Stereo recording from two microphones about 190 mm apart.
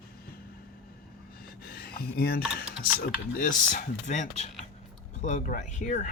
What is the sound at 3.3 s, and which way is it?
Speech, 45° left (ahead or behind).